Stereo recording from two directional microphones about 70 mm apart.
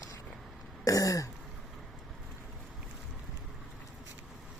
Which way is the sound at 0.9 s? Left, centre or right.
Left.